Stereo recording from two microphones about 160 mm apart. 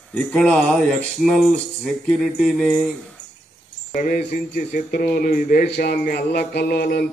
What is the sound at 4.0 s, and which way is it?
Speech, 65° left (ahead or behind).